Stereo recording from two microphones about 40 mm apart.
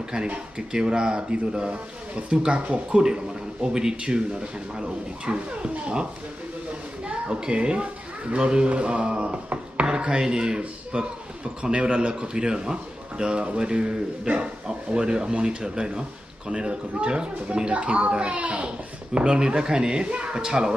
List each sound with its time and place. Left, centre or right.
0.6 s speech: right
7.1 s a woman's voice: right
9.0 s a sound: right
9.8 s speech: right
19.1 s speech: right